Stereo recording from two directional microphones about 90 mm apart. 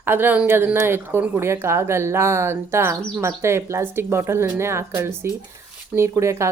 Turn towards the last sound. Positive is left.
turn(degrees=-30)  # may be behind; listen again after turning